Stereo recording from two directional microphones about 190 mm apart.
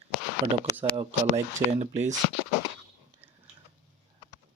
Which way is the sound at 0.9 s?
30° right (ahead or behind).